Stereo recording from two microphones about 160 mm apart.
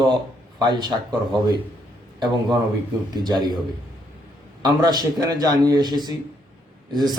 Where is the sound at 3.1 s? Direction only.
25° right (ahead or behind).